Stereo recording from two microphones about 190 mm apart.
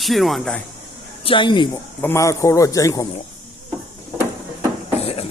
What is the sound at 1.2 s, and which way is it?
Speech, 25° left (ahead or behind).